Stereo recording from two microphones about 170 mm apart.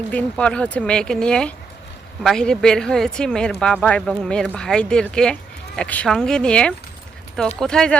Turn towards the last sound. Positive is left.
turn(degrees=5)  # may be behind; listen again after turning